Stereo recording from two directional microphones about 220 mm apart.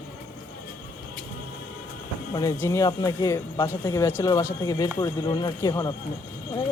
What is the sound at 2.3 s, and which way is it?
Speech, 10° left (ahead or behind).